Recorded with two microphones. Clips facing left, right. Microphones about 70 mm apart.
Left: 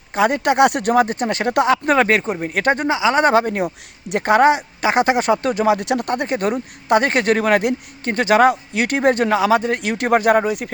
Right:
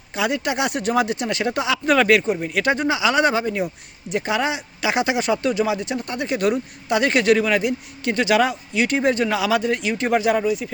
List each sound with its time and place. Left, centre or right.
0.1 s speech: left
2.9 s speech: left
3.3 s speech: left
8.0 s speech: left